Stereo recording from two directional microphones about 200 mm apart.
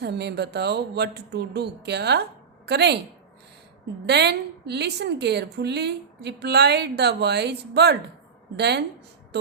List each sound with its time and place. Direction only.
0.0 s speech: 55° right (ahead or behind)
4.0 s speech: 55° right (ahead or behind)